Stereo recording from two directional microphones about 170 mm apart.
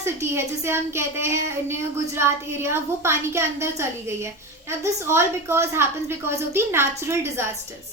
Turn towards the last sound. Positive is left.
turn(degrees=-15)  # may be behind; listen again after turning